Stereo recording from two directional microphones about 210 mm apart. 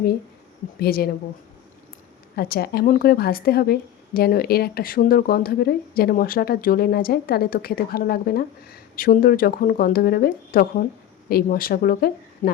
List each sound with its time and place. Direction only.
0.8 s a woman's voice: 45° left (ahead or behind)
2.3 s a woman's voice: 50° left (ahead or behind)